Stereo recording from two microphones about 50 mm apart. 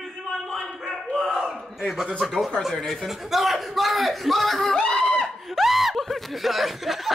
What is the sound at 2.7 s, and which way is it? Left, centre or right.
Speech, centre.